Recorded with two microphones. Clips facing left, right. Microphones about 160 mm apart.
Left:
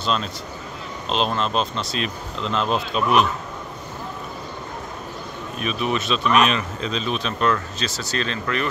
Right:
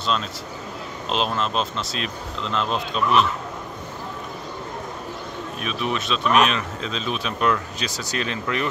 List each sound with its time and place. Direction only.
0.0 s a man's voice: centre (ahead or behind)
5.6 s speech: centre (ahead or behind); by 8.6 s 15° right (ahead or behind)